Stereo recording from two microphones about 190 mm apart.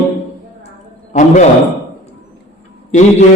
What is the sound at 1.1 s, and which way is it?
Speech, 40° left (ahead or behind).